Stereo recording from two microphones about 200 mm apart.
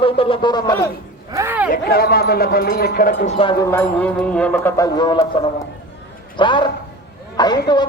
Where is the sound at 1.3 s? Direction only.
10° right (ahead or behind).